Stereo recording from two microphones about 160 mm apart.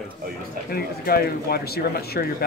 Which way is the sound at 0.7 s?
70° left (ahead or behind).